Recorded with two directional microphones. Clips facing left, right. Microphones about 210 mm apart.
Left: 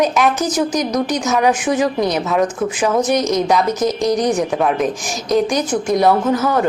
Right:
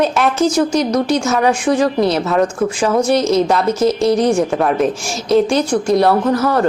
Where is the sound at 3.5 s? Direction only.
Centre (ahead or behind).